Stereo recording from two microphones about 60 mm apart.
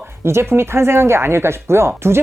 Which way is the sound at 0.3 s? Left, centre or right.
Right.